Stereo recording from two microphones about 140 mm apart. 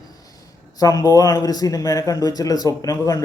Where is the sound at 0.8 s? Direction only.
25° left (ahead or behind).